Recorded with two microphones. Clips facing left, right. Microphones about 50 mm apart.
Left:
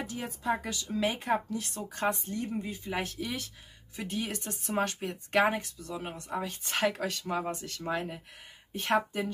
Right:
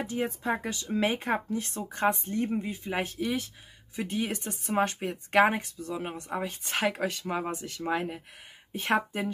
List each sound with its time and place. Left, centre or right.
0.0 s speech: right
2.6 s speech: centre